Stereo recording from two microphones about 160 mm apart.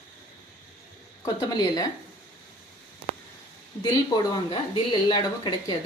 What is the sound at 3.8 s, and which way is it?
Speech, 25° left (ahead or behind).